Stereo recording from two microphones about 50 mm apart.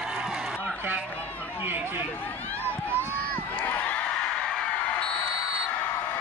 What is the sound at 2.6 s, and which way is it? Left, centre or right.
Run, right.